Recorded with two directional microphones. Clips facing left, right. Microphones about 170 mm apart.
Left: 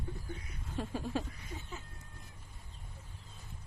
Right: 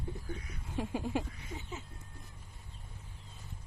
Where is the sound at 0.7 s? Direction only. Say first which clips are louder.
Right 2 dB; 15° right (ahead or behind).